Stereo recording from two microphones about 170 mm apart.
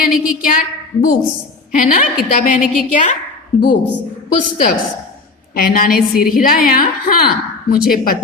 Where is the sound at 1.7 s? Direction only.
55° left (ahead or behind).